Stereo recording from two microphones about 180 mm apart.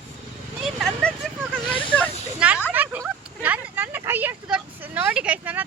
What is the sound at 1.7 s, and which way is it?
Snake, 30° left (ahead or behind).